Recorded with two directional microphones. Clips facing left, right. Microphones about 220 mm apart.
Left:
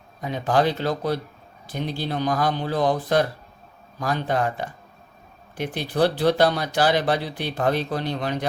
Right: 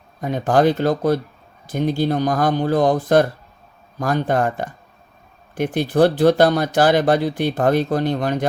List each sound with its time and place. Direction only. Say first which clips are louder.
0.2 s speech: right 5 dB; 50° right (ahead or behind)